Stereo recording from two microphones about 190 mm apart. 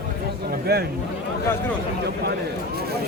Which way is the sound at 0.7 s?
60° right (ahead or behind).